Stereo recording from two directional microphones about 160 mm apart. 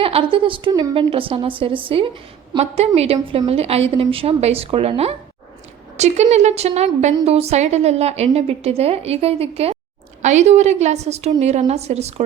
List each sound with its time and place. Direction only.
0.0 s a woman's voice: 35° right (ahead or behind)